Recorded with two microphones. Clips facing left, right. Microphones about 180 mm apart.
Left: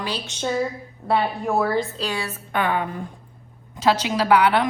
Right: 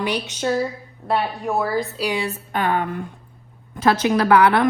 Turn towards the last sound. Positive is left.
turn(degrees=-55)  # may be behind; listen again after turning